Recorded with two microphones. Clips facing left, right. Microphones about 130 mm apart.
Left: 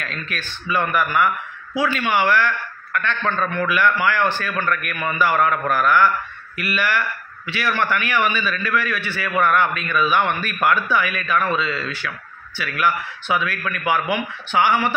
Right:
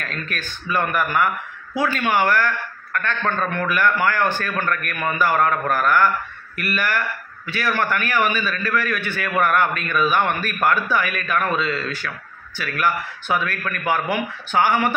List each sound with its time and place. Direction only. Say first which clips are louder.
0.0 s a man's voice: even; 45° right (ahead or behind)